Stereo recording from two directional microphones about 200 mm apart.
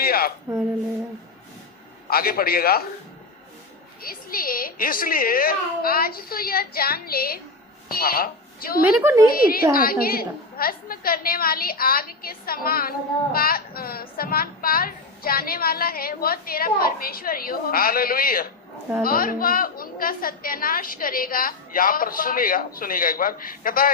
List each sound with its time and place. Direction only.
0.0 s a sound: 50° left (ahead or behind)
2.0 s a woman's voice: 50° left (ahead or behind)
4.0 s a woman's voice: 45° left (ahead or behind)
8.8 s a woman's voice: 10° right (ahead or behind)
9.3 s a woman's voice: 45° left (ahead or behind)